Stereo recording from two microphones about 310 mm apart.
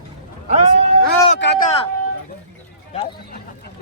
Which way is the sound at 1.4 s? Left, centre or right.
Left.